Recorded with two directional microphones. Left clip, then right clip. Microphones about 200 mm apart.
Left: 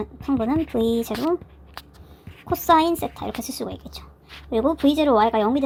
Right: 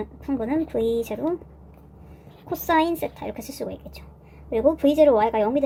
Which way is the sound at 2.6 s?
30° left (ahead or behind).